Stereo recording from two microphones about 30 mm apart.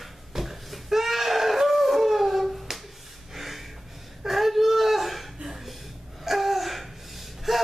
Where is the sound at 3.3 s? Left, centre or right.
Centre.